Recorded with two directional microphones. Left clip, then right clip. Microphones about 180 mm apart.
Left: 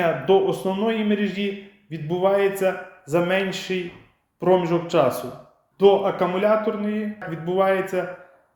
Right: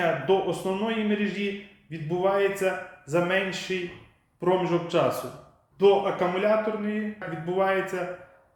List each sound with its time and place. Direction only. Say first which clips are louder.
0.3 s a man's voice: left 5 dB; 40° left (ahead or behind)